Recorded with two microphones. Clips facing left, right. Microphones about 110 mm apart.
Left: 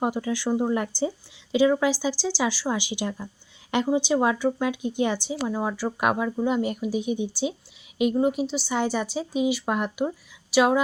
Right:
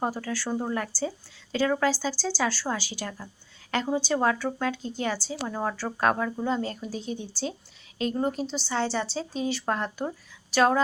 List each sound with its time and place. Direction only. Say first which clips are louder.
0.0 s a woman's voice: left 4 dB; 15° left (ahead or behind)